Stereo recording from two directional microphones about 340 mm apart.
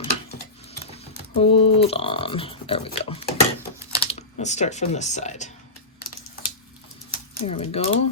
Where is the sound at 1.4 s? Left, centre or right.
Centre.